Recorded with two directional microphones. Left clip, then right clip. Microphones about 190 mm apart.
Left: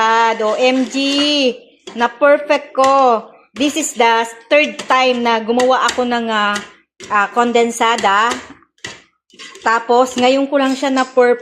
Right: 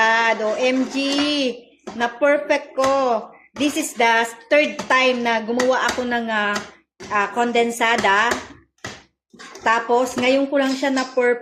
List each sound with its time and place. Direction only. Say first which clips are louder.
0.0 s a sound: left 4 dB; 20° left (ahead or behind)
1.2 s a woman's voice: left 6 dB; 20° left (ahead or behind)
9.6 s a woman's voice: left 5 dB; 25° left (ahead or behind)